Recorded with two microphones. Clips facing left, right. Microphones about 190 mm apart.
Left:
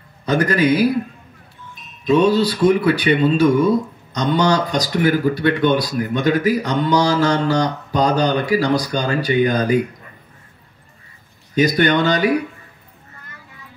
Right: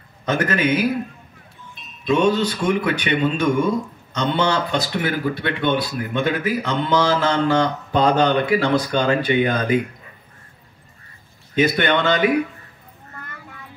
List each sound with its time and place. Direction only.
0.3 s speech: 35° left (ahead or behind)
2.0 s speech: 35° left (ahead or behind)
11.5 s speech: 40° left (ahead or behind)